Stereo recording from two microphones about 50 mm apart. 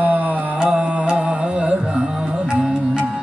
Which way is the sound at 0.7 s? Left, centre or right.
Centre.